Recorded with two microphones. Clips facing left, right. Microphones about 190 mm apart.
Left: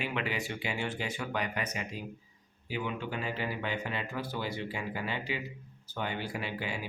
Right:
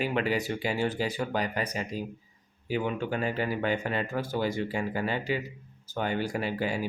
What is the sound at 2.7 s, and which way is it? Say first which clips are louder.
Speech: right 6 dB; 45° right (ahead or behind).